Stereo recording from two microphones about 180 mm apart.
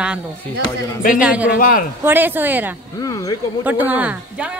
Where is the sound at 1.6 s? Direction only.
50° left (ahead or behind).